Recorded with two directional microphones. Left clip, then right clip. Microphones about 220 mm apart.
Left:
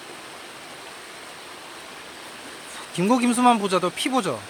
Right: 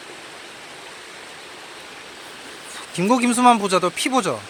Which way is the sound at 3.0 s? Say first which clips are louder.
Right 2 dB; 5° left (ahead or behind).